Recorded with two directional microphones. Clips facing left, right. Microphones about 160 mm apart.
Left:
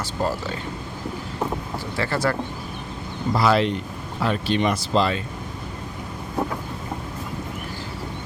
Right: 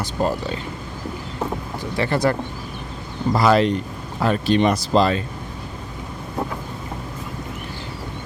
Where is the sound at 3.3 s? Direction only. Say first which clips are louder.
Right 3 dB; 45° right (ahead or behind).